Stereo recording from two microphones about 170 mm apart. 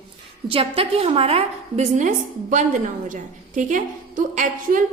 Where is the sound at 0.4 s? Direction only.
35° right (ahead or behind).